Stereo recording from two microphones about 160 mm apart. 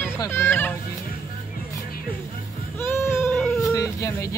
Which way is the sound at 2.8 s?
15° left (ahead or behind).